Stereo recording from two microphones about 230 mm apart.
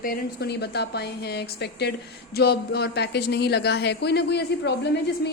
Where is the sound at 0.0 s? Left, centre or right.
Left.